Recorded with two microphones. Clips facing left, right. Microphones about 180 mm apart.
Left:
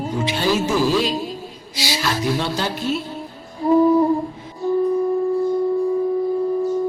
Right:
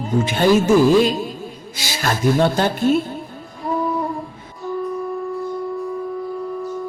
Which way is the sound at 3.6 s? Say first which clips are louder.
Left 8 dB; 30° left (ahead or behind).